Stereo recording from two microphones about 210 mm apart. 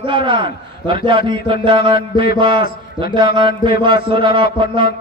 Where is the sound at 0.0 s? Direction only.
25° right (ahead or behind).